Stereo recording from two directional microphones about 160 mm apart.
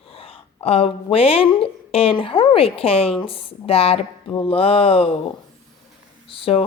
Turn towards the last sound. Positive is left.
turn(degrees=35)  # may be behind; listen again after turning